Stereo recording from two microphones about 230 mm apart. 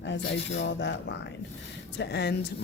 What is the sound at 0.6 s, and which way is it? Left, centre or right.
Speech, left.